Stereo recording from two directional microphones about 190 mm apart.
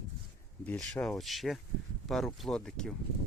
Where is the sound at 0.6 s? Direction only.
5° left (ahead or behind).